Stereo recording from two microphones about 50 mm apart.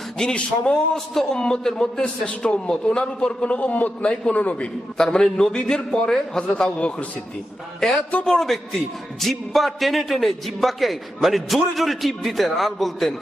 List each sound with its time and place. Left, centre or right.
0.2 s a man's voice: centre
0.9 s a man's voice: centre; by 4.7 s left
4.9 s a man's voice: centre
7.8 s a man's voice: centre